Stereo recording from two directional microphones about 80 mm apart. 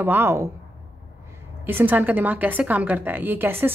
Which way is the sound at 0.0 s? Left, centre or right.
Right.